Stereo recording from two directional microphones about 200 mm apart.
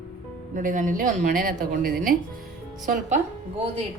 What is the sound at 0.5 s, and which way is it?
A woman's voice, 40° right (ahead or behind).